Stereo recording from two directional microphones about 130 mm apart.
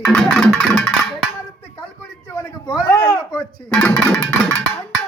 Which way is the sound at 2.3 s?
30° left (ahead or behind).